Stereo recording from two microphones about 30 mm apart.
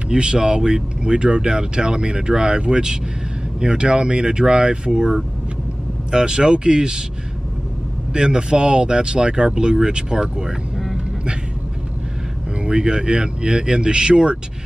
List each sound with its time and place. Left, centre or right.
0.1 s speech: right
1.0 s speech: right
8.1 s speech: right
12.7 s speech: right